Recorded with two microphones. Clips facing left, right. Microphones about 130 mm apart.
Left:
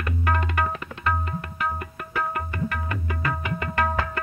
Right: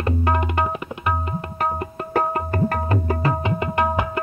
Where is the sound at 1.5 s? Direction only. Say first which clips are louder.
Right 6 dB; 40° right (ahead or behind); by 4.0 s 20° right (ahead or behind).